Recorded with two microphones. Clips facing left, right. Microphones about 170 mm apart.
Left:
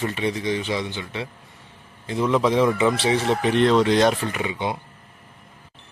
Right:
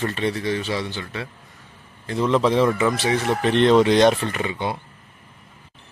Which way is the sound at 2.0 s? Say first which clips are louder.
Right 1 dB; 10° left (ahead or behind).